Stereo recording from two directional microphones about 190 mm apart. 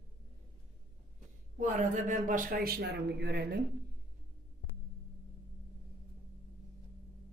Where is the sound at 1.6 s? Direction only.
40° right (ahead or behind); by 3.6 s 60° right (ahead or behind).